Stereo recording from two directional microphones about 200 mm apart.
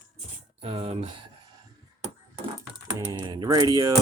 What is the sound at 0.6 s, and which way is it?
Speech, 30° right (ahead or behind).